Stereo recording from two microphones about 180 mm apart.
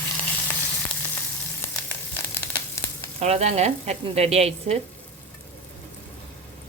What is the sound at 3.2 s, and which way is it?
A woman's voice, 40° right (ahead or behind).